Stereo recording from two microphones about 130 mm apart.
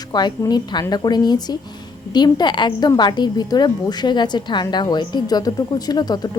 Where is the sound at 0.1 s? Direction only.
35° left (ahead or behind).